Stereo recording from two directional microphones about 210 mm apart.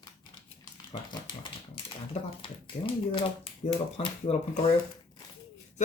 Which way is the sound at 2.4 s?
25° left (ahead or behind).